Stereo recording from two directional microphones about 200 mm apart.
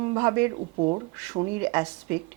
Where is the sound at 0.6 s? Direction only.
30° right (ahead or behind).